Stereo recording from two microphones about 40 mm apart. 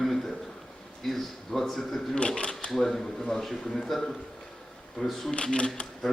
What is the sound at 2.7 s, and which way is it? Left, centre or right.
Speech, centre.